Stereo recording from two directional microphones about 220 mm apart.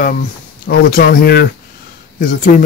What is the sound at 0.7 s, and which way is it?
Speech, 45° left (ahead or behind).